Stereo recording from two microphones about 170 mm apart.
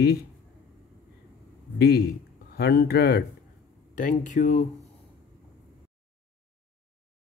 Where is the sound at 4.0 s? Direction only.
50° left (ahead or behind).